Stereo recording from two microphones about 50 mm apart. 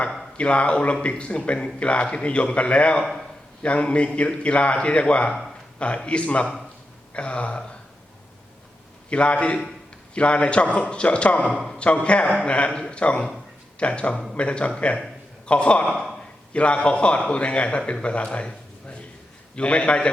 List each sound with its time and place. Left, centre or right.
0.3 s a man's voice: left
3.0 s a man's voice: centre
3.6 s a man's voice: left
7.1 s a sound: left
9.0 s a man's voice: left
15.9 s speech: centre
16.5 s a man's voice: left